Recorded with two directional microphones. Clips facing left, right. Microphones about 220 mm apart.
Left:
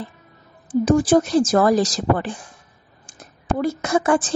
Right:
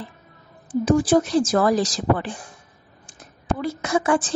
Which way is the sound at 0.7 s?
45° left (ahead or behind).